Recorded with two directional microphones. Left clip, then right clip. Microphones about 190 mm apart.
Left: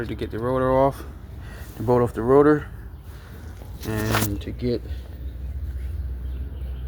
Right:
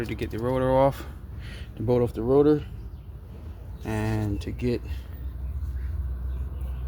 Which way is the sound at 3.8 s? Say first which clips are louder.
Left 5 dB; 15° right (ahead or behind).